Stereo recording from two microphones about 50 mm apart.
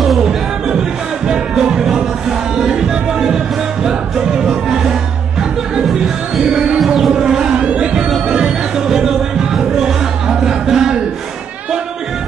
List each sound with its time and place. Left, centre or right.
0.0 s a sound: centre
0.7 s music: centre
4.5 s music: centre
6.4 s music: centre
7.6 s crowd: right
8.3 s music: centre